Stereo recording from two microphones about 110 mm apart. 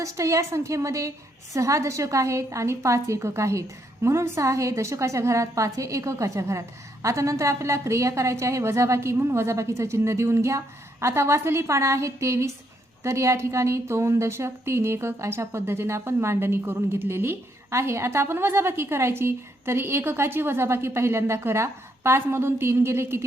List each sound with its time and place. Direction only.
0.0 s a woman's voice: 30° right (ahead or behind)